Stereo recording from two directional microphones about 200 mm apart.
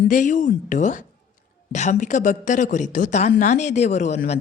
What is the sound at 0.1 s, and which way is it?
A woman's voice, 40° left (ahead or behind).